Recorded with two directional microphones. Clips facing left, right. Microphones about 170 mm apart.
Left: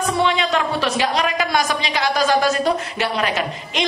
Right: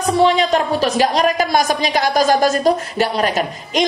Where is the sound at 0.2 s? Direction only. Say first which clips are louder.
Right 6 dB; 40° right (ahead or behind).